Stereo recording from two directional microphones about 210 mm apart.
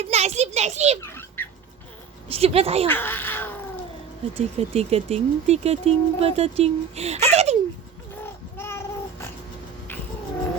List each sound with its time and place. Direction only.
0.0 s a child's voice: 30° right (ahead or behind)
1.0 s rodents: 10° left (ahead or behind)
2.3 s speech: 30° right (ahead or behind)
2.8 s speech: 10° left (ahead or behind)
4.4 s speech: 30° right (ahead or behind)
8.5 s babbling: 10° left (ahead or behind)